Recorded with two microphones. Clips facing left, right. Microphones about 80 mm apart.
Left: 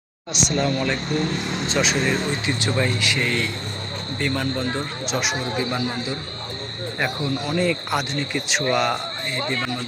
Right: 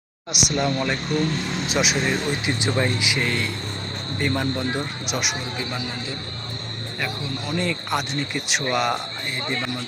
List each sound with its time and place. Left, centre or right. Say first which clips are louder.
0.4 s speech: left 1 dB; centre
1.2 s speech: even; left
1.6 s speech: left 1 dB; centre
7.4 s speech: left 2 dB; centre